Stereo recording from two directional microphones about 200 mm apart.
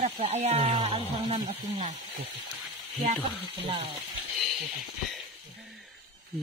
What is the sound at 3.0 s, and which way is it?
Sizzle, 30° right (ahead or behind).